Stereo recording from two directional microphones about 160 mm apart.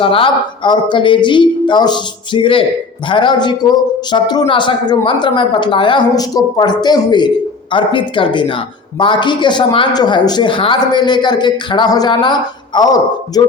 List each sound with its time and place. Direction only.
0.0 s speech: 35° left (ahead or behind)